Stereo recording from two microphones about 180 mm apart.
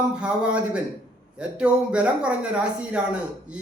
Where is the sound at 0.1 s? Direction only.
5° right (ahead or behind).